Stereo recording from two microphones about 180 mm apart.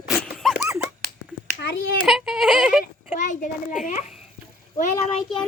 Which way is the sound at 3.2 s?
45° left (ahead or behind).